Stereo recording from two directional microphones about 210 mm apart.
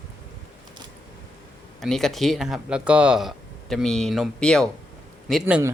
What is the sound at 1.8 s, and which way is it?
A man's voice, centre (ahead or behind).